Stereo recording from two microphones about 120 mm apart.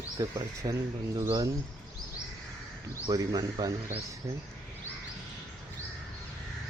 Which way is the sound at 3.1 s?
35° right (ahead or behind).